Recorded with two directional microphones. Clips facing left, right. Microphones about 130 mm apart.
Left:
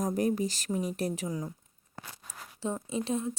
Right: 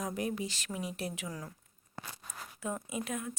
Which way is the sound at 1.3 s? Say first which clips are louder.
Left 7 dB; 20° left (ahead or behind).